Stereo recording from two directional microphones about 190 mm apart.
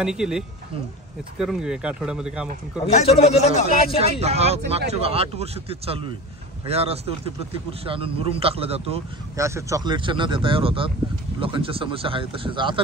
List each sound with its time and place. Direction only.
0.0 s speech: 5° right (ahead or behind)
2.9 s speech: 35° left (ahead or behind)
4.0 s speech: 35° right (ahead or behind)
9.4 s speech: 15° right (ahead or behind)